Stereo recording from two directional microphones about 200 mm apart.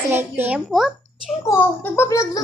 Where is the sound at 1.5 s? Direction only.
15° left (ahead or behind).